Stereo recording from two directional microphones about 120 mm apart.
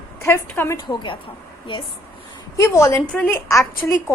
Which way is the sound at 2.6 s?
25° left (ahead or behind).